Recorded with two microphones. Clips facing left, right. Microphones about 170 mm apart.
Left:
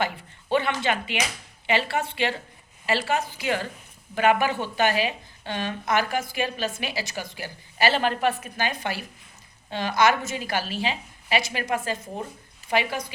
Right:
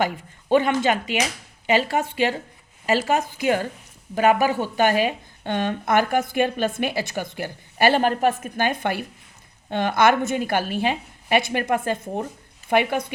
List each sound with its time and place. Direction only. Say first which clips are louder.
0.5 s a woman's voice: right 5 dB; 45° right (ahead or behind)